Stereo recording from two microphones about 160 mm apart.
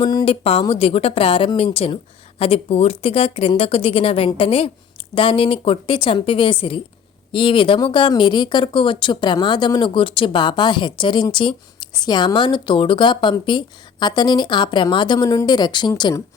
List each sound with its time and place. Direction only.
0.1 s speech: 25° left (ahead or behind)
0.7 s speech: 35° left (ahead or behind)